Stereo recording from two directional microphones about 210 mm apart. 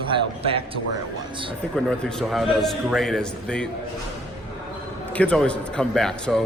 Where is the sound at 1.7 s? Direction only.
5° left (ahead or behind).